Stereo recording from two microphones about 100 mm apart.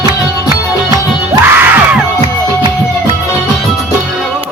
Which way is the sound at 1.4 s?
20° right (ahead or behind).